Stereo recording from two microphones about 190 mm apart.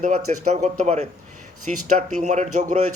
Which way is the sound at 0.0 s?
35° right (ahead or behind).